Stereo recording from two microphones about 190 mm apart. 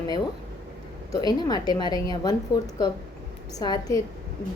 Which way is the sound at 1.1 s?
20° left (ahead or behind).